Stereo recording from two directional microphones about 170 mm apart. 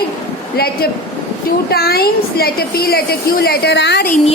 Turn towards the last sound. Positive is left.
turn(degrees=90)